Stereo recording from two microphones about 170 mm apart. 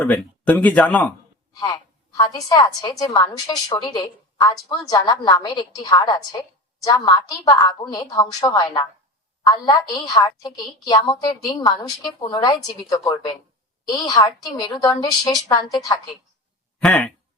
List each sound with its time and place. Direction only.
0.0 s speech: 10° left (ahead or behind)
1.5 s a woman's voice: 20° left (ahead or behind)
13.8 s a woman's voice: 25° left (ahead or behind)
16.8 s speech: 10° left (ahead or behind)